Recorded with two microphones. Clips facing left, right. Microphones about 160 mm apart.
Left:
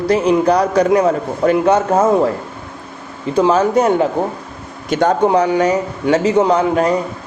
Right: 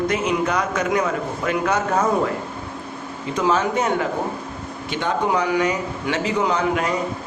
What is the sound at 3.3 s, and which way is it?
A man's voice, 35° left (ahead or behind).